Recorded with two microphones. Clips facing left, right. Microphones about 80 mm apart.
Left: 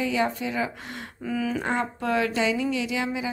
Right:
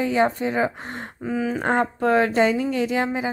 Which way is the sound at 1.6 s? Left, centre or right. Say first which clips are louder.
Right 6 dB; right.